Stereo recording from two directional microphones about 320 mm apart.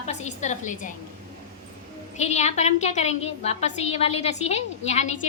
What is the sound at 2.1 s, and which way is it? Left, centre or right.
A woman's voice, left.